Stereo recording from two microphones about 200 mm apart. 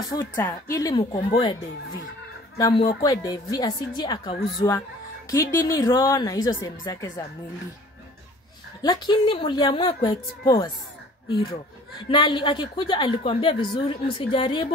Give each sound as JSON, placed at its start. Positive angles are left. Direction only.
{"t": 0.1, "sound": "a woman's voice", "side_deg": 20}
{"t": 8.8, "sound": "a woman's voice", "side_deg": 25}
{"t": 12.1, "sound": "a woman's voice", "side_deg": 25}